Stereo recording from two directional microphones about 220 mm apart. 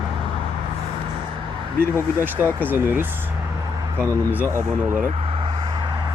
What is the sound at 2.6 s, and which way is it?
Speech, 10° right (ahead or behind).